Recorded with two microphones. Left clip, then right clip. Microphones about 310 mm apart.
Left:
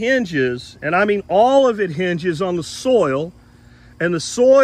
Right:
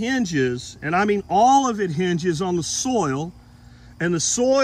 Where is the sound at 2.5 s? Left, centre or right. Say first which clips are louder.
Left 6 dB; centre.